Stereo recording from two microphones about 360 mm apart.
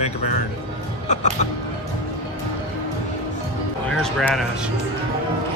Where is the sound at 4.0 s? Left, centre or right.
Centre.